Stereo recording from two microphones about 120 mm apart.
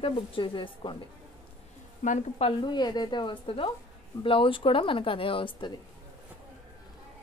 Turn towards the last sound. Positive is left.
turn(degrees=45)  # may be behind; listen again after turning